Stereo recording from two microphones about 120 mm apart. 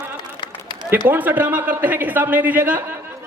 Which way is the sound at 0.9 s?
15° right (ahead or behind).